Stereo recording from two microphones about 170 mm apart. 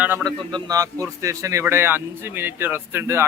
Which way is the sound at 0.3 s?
20° right (ahead or behind).